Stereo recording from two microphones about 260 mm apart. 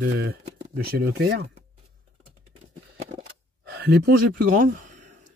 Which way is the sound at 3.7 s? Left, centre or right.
Right.